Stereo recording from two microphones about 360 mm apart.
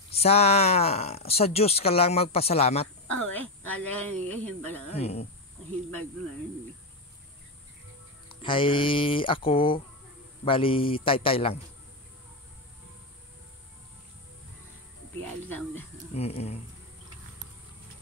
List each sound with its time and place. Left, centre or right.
0.2 s speech: centre
3.1 s speech: centre
4.1 s speech: right
4.6 s speech: centre
4.9 s speech: centre
8.3 s speech: centre
16.1 s speech: centre